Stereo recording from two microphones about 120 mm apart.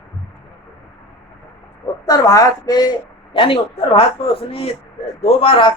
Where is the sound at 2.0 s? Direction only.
30° left (ahead or behind).